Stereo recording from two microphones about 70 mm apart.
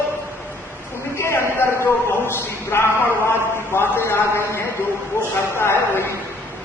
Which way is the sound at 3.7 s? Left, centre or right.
Left.